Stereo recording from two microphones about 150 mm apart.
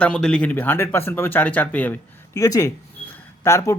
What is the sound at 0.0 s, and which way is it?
Speech, 5° left (ahead or behind).